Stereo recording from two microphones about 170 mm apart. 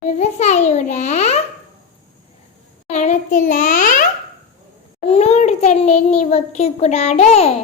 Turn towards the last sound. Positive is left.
turn(degrees=40)  # may be behind; listen again after turning